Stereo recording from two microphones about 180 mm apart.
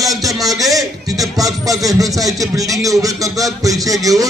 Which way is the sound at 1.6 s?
20° right (ahead or behind).